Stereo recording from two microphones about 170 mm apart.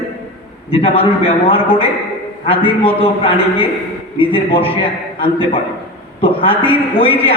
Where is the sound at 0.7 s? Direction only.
35° left (ahead or behind).